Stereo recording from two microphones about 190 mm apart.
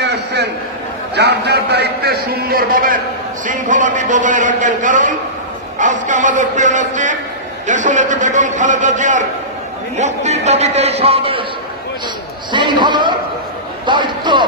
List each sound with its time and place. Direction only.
0.0 s a sound: 65° right (ahead or behind)
1.1 s a man's voice: 60° right (ahead or behind); by 11.4 s 30° right (ahead or behind)
12.5 s a man's voice: 25° right (ahead or behind)